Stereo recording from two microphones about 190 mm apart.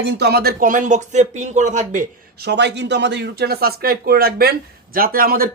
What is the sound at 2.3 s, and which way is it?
Speech, 60° right (ahead or behind).